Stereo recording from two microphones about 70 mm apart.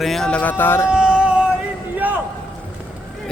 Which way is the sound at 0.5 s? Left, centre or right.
Left.